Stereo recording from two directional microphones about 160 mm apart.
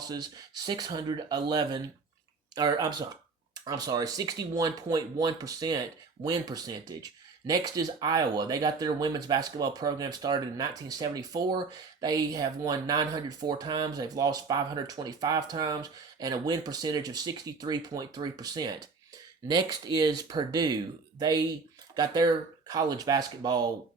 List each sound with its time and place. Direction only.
0.0 s speech: 25° right (ahead or behind)